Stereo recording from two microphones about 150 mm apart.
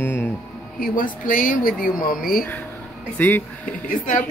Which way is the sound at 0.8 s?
65° left (ahead or behind).